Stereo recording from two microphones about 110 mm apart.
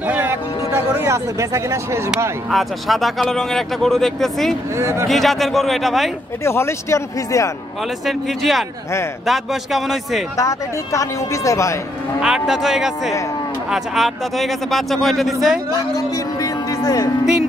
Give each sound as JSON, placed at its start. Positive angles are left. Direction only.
{"t": 0.0, "sound": "speech", "side_deg": -15}
{"t": 2.5, "sound": "speech", "side_deg": 0}
{"t": 4.7, "sound": "speech", "side_deg": -25}
{"t": 5.0, "sound": "speech", "side_deg": 0}
{"t": 6.4, "sound": "speech", "side_deg": 25}
{"t": 8.0, "sound": "speech", "side_deg": 0}
{"t": 10.3, "sound": "speech", "side_deg": 30}
{"t": 12.2, "sound": "speech", "side_deg": -5}
{"t": 15.7, "sound": "a man's voice", "side_deg": 35}